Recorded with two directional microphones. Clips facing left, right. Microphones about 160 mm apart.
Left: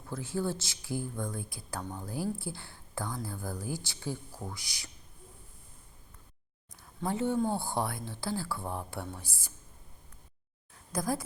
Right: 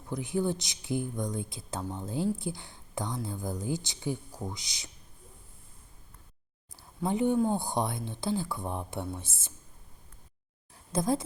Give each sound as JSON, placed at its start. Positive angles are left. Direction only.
{"t": 0.1, "sound": "speech", "side_deg": -15}
{"t": 7.0, "sound": "speech", "side_deg": -15}
{"t": 10.9, "sound": "speech", "side_deg": -25}